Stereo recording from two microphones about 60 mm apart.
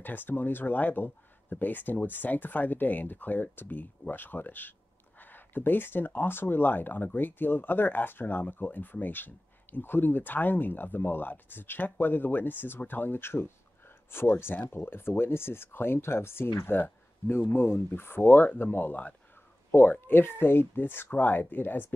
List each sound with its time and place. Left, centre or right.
0.0 s speech: left